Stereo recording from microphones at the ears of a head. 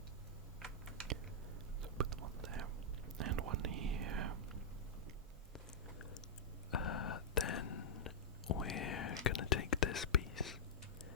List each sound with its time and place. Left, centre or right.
1.8 s whispering: right
6.7 s whispering: left